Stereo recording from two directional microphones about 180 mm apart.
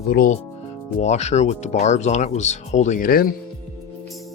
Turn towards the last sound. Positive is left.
turn(degrees=55)  # may be behind; listen again after turning